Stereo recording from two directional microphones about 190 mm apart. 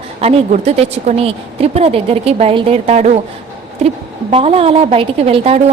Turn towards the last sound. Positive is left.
turn(degrees=-30)  # may be behind; listen again after turning